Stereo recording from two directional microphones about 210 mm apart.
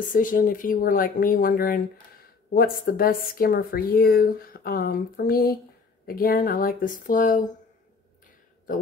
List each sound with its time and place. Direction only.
0.1 s a woman's voice: 40° left (ahead or behind)